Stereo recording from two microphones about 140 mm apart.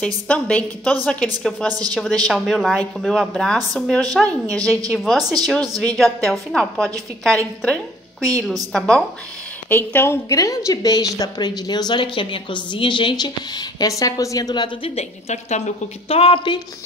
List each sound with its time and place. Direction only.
0.0 s a woman's voice: 10° left (ahead or behind)
5.6 s speech: 25° right (ahead or behind)
5.9 s a woman's voice: centre (ahead or behind)
9.7 s a woman's voice: 15° left (ahead or behind); by 14.9 s 35° left (ahead or behind)
15.0 s a woman's voice: 50° left (ahead or behind)